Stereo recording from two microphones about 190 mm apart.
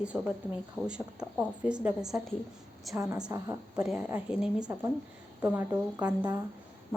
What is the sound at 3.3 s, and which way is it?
Speech, 20° right (ahead or behind).